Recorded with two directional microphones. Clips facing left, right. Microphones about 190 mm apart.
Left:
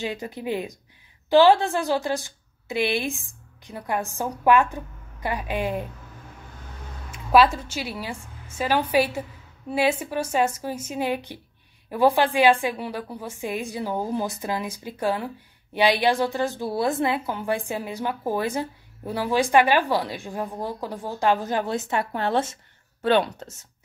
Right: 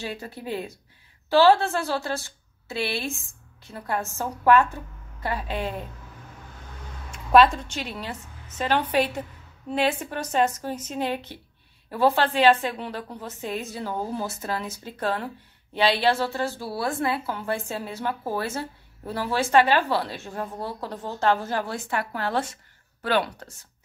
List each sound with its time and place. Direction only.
0.0 s a woman's voice: 15° left (ahead or behind)
7.1 s a woman's voice: 5° left (ahead or behind); by 23.5 s 25° left (ahead or behind)